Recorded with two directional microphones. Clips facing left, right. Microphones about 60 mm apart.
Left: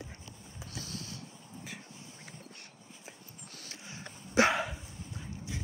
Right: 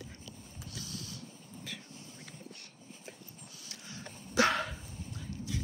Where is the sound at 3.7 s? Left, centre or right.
Left.